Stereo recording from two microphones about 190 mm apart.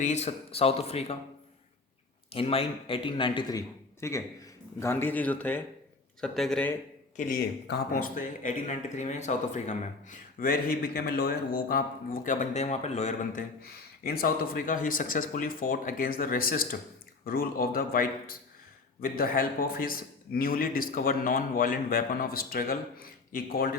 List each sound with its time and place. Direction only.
0.0 s speech: 35° left (ahead or behind)
2.3 s speech: 30° left (ahead or behind); by 6.7 s 5° left (ahead or behind)
7.2 s speech: 50° left (ahead or behind)
13.6 s speech: 55° left (ahead or behind)